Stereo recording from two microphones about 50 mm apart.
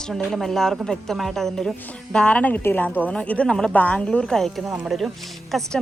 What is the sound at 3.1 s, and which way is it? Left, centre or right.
Speech, left.